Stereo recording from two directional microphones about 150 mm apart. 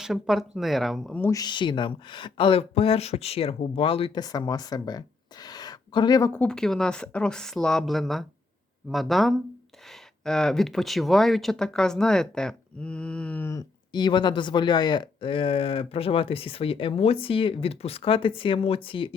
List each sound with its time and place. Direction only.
0.0 s speech: centre (ahead or behind)
1.2 s speech: 25° left (ahead or behind)
4.2 s speech: 25° left (ahead or behind)
6.3 s speech: 5° left (ahead or behind)
13.9 s speech: 30° left (ahead or behind)